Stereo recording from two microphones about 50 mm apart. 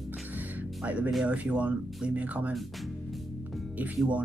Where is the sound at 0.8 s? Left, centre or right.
Right.